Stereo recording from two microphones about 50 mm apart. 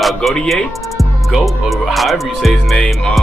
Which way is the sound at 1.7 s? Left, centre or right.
Centre.